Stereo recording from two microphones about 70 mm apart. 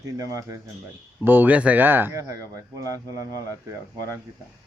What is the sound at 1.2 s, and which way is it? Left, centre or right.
Speech, right.